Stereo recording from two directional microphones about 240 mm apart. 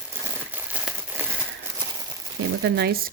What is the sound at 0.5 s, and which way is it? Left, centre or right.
Crumpling, centre.